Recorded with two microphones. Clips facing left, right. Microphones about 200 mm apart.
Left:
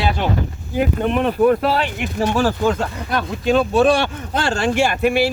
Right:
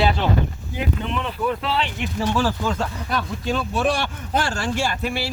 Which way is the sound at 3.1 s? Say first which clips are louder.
Left 8 dB; 70° left (ahead or behind).